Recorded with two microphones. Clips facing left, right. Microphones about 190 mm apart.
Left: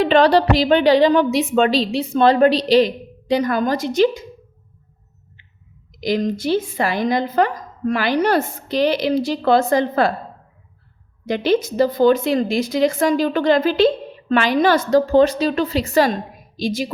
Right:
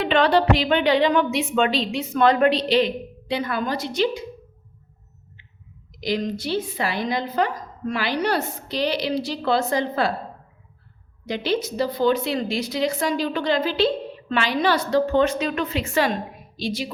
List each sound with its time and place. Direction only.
0.0 s a woman's voice: 35° left (ahead or behind)
6.0 s speech: 45° left (ahead or behind)
11.3 s speech: 50° left (ahead or behind)